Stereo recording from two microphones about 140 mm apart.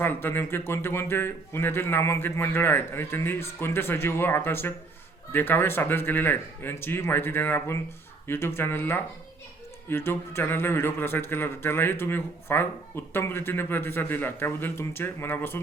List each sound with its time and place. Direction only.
0.0 s a man's voice: 15° left (ahead or behind)